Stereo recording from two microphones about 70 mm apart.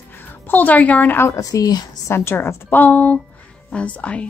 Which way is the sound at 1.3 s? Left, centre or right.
Left.